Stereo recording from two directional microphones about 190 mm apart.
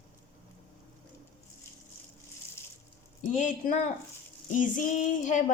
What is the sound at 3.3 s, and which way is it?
A woman's voice, 40° left (ahead or behind).